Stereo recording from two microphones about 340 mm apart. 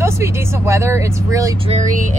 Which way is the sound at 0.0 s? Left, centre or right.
Centre.